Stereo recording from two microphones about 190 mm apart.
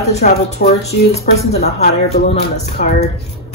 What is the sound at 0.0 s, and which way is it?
A woman's voice, 35° left (ahead or behind).